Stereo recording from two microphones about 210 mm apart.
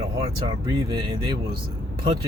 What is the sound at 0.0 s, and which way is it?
Speech, 25° right (ahead or behind).